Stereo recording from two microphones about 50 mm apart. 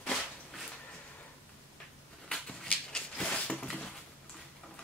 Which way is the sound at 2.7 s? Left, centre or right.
Centre.